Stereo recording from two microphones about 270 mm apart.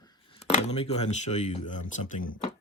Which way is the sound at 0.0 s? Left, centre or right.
Centre.